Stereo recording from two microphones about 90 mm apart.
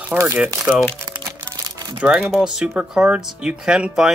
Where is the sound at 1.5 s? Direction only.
40° right (ahead or behind).